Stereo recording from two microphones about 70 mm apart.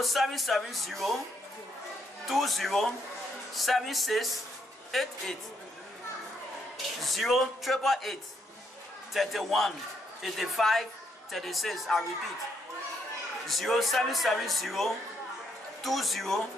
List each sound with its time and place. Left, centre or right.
0.0 s speech: centre
2.2 s speech: centre
7.0 s speech: centre
13.5 s speech: centre